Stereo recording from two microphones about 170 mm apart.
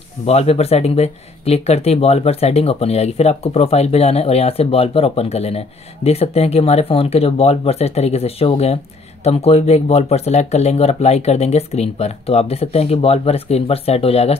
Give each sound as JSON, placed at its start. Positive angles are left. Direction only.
{"t": 0.3, "sound": "speech", "side_deg": 40}